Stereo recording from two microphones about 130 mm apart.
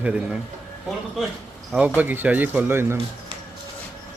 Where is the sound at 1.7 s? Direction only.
10° right (ahead or behind).